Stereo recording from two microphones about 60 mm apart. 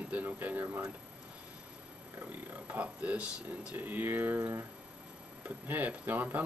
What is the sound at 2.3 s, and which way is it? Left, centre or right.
Speech, right.